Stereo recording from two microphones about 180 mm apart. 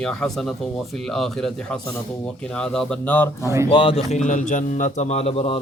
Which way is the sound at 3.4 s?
15° right (ahead or behind).